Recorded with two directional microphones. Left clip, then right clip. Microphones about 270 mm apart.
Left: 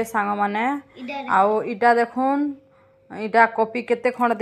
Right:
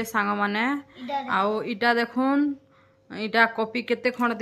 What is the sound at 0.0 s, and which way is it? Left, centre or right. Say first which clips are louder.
A woman's voice: left 3 dB; centre.